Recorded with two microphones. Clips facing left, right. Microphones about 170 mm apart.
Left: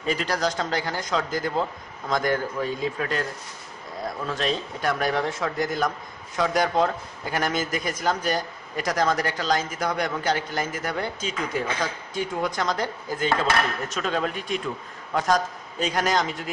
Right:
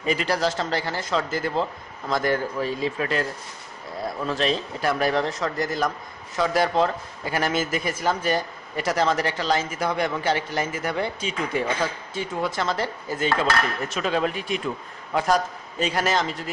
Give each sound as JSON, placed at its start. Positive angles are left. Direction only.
{"t": 0.0, "sound": "a man's voice", "side_deg": -10}
{"t": 4.4, "sound": "a man's voice", "side_deg": -5}